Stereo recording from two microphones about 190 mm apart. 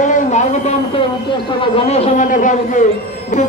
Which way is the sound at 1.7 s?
35° left (ahead or behind).